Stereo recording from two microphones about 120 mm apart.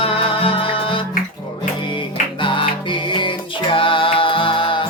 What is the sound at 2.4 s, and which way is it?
Music, 45° left (ahead or behind).